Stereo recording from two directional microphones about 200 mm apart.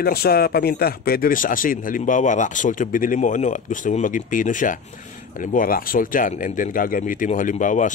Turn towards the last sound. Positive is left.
turn(degrees=40)  # may be behind; listen again after turning